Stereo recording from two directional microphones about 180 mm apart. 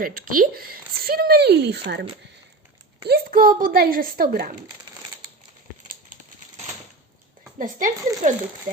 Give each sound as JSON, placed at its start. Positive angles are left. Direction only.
{"t": 0.0, "sound": "speech", "side_deg": -50}
{"t": 3.1, "sound": "a woman's voice", "side_deg": -55}
{"t": 7.6, "sound": "a woman's voice", "side_deg": -45}